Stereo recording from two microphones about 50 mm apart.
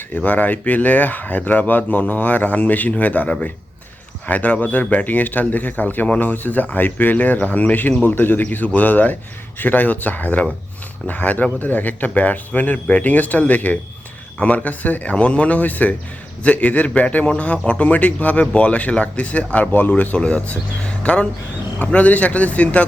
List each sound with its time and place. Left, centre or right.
0.1 s speech: left